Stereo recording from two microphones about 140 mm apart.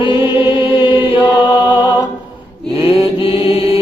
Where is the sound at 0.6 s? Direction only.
35° left (ahead or behind).